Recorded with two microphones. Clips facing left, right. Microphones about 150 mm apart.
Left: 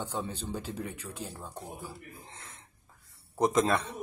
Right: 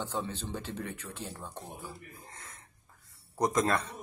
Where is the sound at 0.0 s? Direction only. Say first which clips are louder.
Even; 15° left (ahead or behind).